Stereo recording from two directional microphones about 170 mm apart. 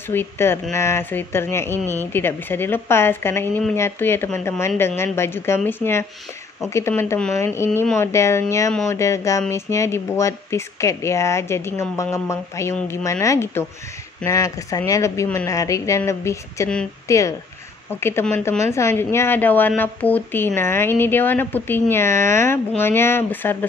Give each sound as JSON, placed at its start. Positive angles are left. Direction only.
{"t": 0.1, "sound": "a woman's voice", "side_deg": 15}